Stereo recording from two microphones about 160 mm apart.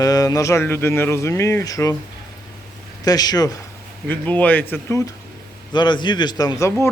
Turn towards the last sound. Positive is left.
turn(degrees=20)  # may be behind; listen again after turning